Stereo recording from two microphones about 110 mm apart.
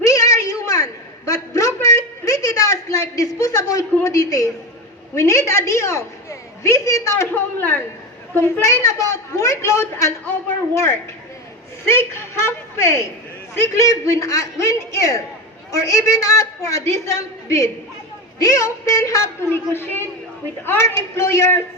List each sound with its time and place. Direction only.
0.0 s a sound: 30° left (ahead or behind)
5.1 s a woman's voice: 30° left (ahead or behind)
7.3 s a man's voice: 15° left (ahead or behind)
11.9 s a man's voice: 20° left (ahead or behind)